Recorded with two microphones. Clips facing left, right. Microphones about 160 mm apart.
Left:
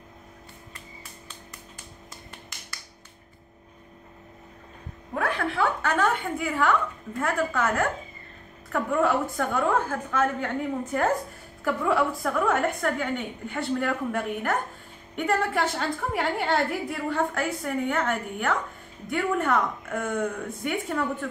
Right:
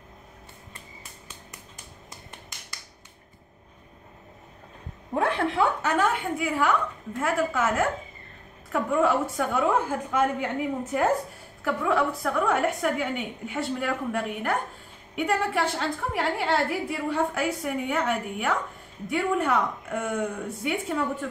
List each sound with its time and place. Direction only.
5.1 s a woman's voice: 25° right (ahead or behind)
5.8 s a woman's voice: 10° right (ahead or behind)